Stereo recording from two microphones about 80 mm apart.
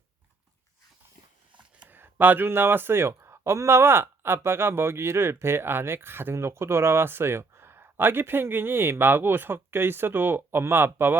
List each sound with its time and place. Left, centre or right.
1.8 s speech: right